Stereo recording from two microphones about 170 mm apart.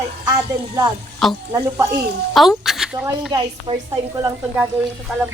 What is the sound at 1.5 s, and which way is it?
Speech, 20° right (ahead or behind).